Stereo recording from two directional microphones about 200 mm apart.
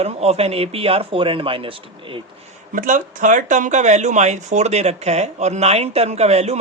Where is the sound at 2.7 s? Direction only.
40° right (ahead or behind).